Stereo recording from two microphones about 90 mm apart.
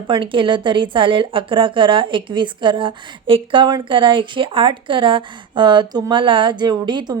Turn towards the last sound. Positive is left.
turn(degrees=-55)  # may be behind; listen again after turning